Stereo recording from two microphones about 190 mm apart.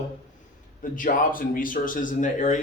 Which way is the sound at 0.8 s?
45° left (ahead or behind).